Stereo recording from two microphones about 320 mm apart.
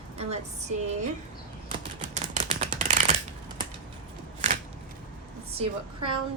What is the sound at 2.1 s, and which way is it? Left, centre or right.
Typewriter, right.